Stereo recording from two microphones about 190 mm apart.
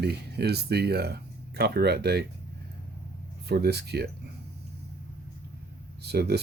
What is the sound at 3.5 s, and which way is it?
Speech, 60° right (ahead or behind).